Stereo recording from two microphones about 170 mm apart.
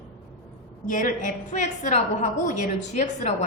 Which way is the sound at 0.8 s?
50° left (ahead or behind).